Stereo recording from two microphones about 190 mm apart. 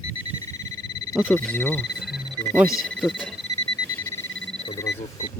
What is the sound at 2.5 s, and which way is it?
Speech, 5° right (ahead or behind).